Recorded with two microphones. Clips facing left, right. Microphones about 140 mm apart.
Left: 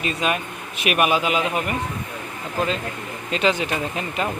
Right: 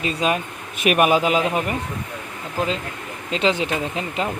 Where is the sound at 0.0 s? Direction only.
30° right (ahead or behind).